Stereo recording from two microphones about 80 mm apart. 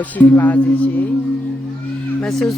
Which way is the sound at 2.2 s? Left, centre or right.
Centre.